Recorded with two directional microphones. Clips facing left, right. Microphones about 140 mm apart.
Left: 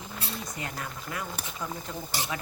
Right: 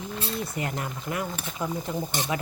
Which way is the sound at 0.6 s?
20° right (ahead or behind).